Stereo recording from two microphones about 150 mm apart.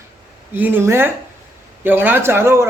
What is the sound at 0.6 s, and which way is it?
A man's voice, 10° right (ahead or behind).